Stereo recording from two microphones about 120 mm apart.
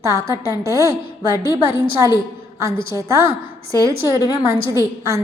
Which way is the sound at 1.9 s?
25° right (ahead or behind).